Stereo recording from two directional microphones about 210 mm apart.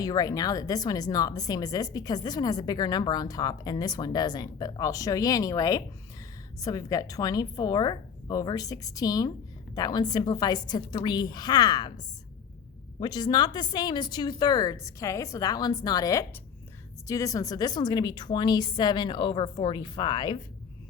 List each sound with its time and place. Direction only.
0.0 s a woman's voice: 20° left (ahead or behind)
13.0 s a woman's voice: 20° left (ahead or behind)